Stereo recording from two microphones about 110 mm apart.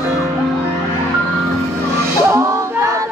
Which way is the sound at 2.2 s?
30° right (ahead or behind).